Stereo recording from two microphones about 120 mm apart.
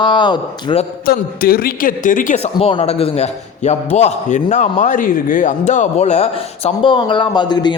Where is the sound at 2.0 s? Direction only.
90° left.